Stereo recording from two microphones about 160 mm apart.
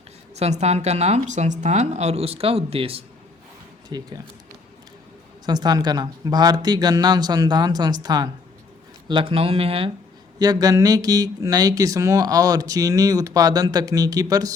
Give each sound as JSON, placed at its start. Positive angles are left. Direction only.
{"t": 0.3, "sound": "a woman's voice", "side_deg": -45}
{"t": 3.9, "sound": "speech", "side_deg": -25}
{"t": 5.5, "sound": "speech", "side_deg": -25}
{"t": 10.3, "sound": "speech", "side_deg": -25}